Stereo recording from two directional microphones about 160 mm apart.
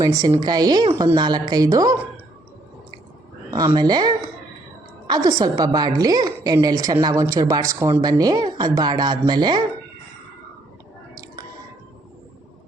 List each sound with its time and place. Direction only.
0.0 s a woman's voice: 20° right (ahead or behind)
3.8 s a woman's voice: 25° right (ahead or behind)